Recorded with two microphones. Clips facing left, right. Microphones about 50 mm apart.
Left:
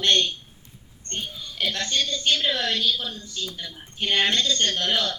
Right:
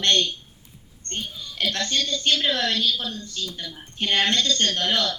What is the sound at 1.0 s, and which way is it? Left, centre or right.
Speech, centre.